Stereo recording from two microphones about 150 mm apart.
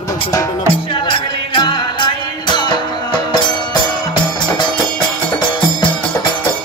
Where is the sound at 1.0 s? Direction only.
30° left (ahead or behind).